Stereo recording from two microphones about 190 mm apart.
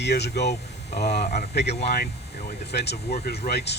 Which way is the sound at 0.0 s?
60° left (ahead or behind).